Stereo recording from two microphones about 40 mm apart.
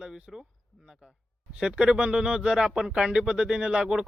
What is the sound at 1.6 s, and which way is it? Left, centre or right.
Speech, right.